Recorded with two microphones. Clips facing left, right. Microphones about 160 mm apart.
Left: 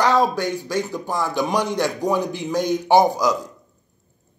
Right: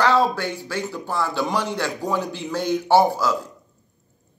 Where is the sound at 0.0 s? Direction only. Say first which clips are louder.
Left 1 dB; 15° left (ahead or behind).